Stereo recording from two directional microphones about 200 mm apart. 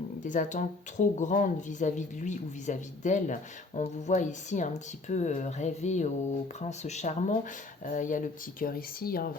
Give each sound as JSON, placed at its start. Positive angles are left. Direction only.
{"t": 0.2, "sound": "speech", "side_deg": 40}